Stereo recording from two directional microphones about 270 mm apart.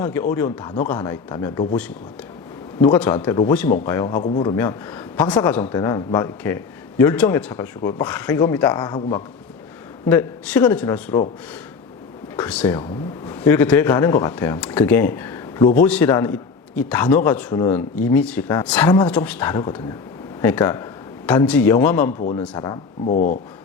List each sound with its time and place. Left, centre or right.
0.0 s a man's voice: centre
4.2 s a man's voice: left
12.4 s a man's voice: centre
23.0 s speech: left